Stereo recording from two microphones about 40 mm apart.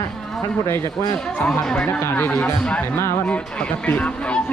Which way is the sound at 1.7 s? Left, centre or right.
Left.